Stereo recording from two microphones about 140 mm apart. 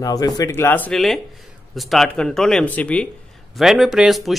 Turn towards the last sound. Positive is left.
turn(degrees=0)  # may be behind; listen again after turning